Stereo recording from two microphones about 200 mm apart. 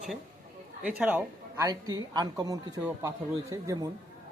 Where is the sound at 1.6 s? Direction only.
20° right (ahead or behind).